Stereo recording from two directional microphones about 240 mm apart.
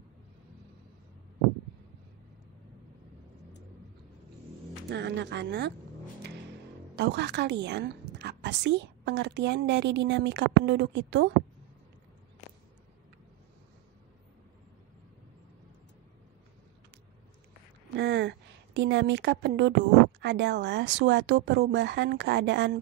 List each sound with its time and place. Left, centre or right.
4.8 s speech: right
7.0 s a woman's voice: right
17.9 s a sound: right
20.2 s a woman's voice: right